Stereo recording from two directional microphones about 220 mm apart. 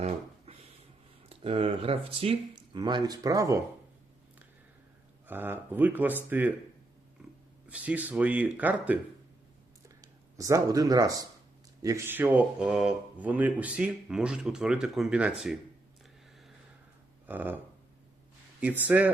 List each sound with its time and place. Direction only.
1.3 s speech: 25° right (ahead or behind)
5.3 s speech: 10° right (ahead or behind)
7.7 s speech: 5° right (ahead or behind)
10.0 s speech: 15° right (ahead or behind)
17.2 s speech: 10° right (ahead or behind)
18.6 s speech: 10° right (ahead or behind)